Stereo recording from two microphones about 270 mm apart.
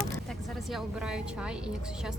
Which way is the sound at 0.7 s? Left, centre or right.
Centre.